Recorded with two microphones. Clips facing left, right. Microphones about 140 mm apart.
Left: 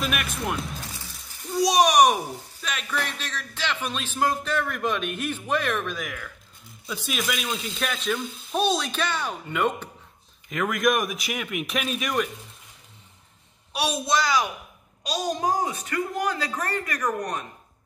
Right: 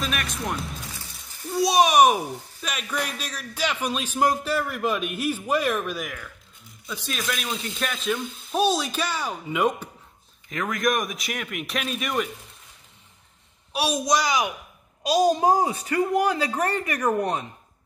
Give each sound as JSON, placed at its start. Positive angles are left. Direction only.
{"t": 0.0, "sound": "a child's voice", "side_deg": 5}
{"t": 6.9, "sound": "speech", "side_deg": 5}
{"t": 10.5, "sound": "speech", "side_deg": 0}
{"t": 13.7, "sound": "a man's voice", "side_deg": -10}
{"t": 15.0, "sound": "a woman's voice", "side_deg": -30}